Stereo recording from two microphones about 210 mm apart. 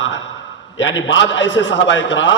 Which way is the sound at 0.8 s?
60° left (ahead or behind).